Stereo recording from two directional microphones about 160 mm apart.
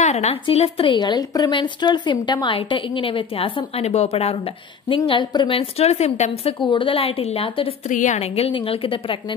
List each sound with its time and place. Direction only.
0.0 s a woman's voice: 45° left (ahead or behind)
6.6 s a woman's voice: 30° left (ahead or behind)
7.9 s a woman's voice: 50° left (ahead or behind); by 9.2 s 30° left (ahead or behind)